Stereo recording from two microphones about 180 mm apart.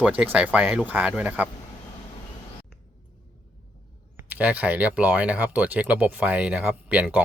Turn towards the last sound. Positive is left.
turn(degrees=-5)  # may be behind; listen again after turning